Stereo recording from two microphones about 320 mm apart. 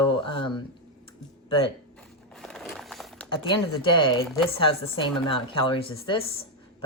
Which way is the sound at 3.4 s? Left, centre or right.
Centre.